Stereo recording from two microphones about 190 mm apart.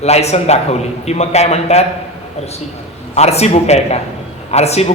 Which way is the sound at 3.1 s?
35° left (ahead or behind).